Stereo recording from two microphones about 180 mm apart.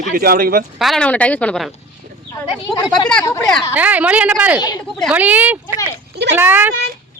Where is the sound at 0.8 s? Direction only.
5° left (ahead or behind).